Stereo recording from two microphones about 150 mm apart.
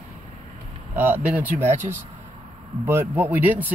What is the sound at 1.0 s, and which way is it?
Speech, 10° right (ahead or behind).